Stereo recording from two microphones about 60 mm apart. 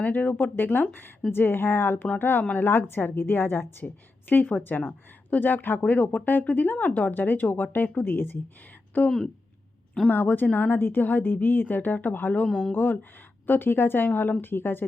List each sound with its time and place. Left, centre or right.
0.0 s a woman's voice: left
12.5 s speech: centre
12.7 s a woman's voice: left